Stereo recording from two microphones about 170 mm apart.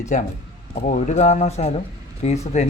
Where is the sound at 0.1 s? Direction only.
45° left (ahead or behind).